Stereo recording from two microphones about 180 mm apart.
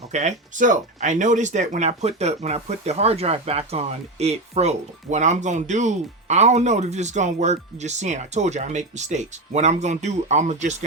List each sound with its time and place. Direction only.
0.1 s speech: 40° right (ahead or behind)